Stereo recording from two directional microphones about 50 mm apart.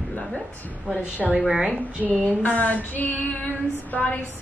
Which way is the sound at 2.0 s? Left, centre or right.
Left.